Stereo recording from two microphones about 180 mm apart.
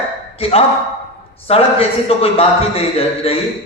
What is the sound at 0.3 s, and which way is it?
Speech, 30° left (ahead or behind).